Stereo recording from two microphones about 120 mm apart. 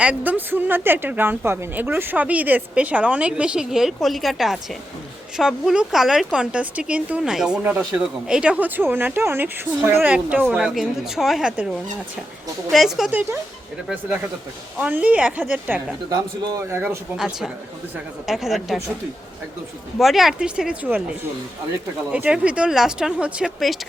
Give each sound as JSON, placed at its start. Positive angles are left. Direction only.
{"t": 0.0, "sound": "a woman's voice", "side_deg": -10}
{"t": 13.9, "sound": "a woman's voice", "side_deg": -10}
{"t": 17.2, "sound": "a woman's voice", "side_deg": -5}
{"t": 20.0, "sound": "a woman's voice", "side_deg": 0}